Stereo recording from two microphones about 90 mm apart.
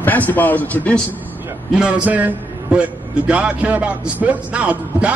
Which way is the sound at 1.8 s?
10° right (ahead or behind).